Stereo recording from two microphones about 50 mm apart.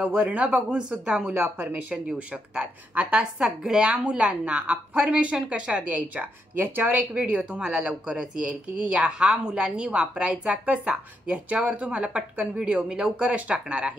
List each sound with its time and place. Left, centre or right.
0.0 s speech: right
6.1 s speech: right
7.5 s speech: centre